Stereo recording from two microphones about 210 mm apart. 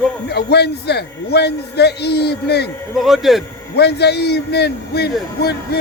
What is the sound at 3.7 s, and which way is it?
A man's voice, 50° left (ahead or behind).